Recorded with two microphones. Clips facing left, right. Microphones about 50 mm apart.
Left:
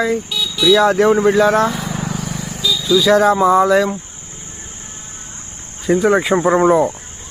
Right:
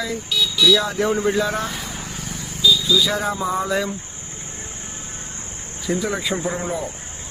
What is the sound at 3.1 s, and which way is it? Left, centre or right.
Speech, left.